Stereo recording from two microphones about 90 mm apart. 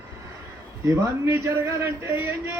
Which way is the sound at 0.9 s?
35° right (ahead or behind).